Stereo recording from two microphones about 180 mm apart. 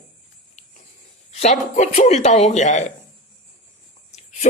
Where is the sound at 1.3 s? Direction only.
35° left (ahead or behind).